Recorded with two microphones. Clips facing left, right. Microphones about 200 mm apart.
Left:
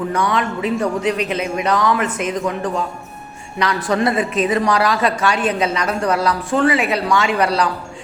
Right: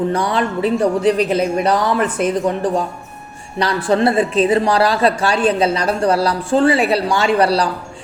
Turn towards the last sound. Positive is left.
turn(degrees=-35)  # may be behind; listen again after turning